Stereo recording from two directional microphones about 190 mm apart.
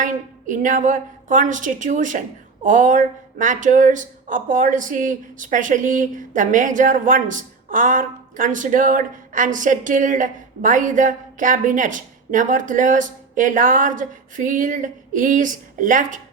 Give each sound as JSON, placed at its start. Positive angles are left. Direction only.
{"t": 0.0, "sound": "speech", "side_deg": -45}